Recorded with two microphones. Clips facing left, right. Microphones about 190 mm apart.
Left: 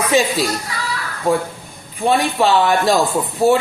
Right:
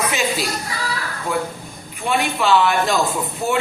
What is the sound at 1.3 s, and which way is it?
Speech, 35° left (ahead or behind).